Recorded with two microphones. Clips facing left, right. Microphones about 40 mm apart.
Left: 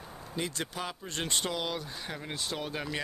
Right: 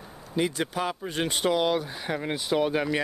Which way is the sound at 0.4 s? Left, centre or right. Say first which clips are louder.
Right 8 dB; centre.